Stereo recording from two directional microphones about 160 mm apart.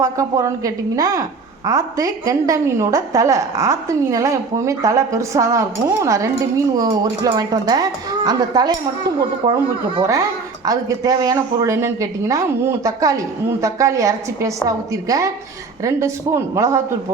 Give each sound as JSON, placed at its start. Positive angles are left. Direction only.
{"t": 0.0, "sound": "a woman's voice", "side_deg": -20}